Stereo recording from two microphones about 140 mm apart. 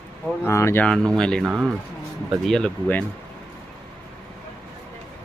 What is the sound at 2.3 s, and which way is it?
Speech, centre (ahead or behind).